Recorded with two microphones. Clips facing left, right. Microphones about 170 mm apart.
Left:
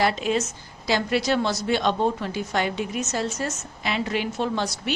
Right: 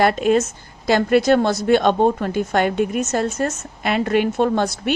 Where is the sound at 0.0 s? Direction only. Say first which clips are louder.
Right 7 dB; 55° right (ahead or behind).